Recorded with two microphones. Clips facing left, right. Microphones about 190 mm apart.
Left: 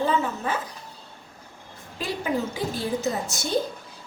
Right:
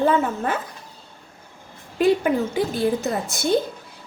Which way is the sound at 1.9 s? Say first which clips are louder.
Right 9 dB; 60° right (ahead or behind).